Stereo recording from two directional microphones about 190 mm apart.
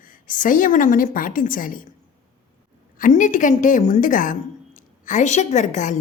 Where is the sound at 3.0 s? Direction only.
45° left (ahead or behind).